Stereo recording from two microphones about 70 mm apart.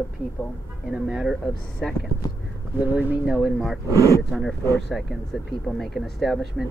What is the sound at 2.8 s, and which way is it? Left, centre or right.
Speech, right.